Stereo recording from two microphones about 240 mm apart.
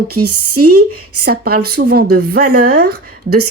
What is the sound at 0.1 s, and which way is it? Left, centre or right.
Speech, right.